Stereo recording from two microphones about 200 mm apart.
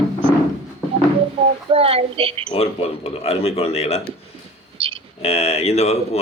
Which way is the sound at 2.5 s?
30° left (ahead or behind).